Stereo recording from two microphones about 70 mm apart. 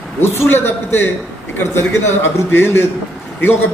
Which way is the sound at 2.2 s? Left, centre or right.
Left.